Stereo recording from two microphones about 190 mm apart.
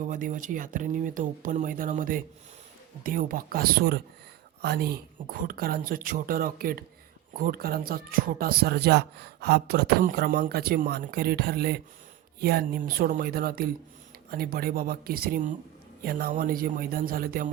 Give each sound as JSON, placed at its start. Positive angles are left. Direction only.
{"t": 0.0, "sound": "speech", "side_deg": -45}